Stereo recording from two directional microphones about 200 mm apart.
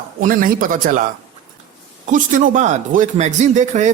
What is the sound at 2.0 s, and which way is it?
Speech, 40° right (ahead or behind).